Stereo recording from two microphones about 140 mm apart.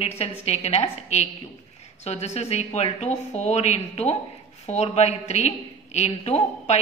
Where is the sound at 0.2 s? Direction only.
50° left (ahead or behind).